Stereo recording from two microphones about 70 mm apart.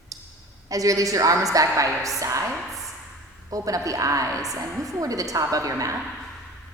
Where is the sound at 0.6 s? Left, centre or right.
Right.